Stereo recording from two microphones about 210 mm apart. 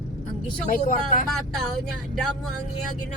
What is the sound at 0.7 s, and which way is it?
Speech, 40° left (ahead or behind).